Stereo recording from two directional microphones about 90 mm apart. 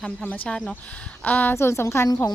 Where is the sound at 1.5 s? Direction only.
30° left (ahead or behind).